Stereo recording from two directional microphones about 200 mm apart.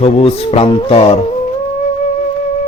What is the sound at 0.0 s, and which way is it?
Speech, 30° left (ahead or behind).